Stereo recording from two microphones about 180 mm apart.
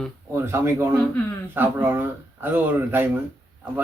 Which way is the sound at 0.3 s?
15° right (ahead or behind).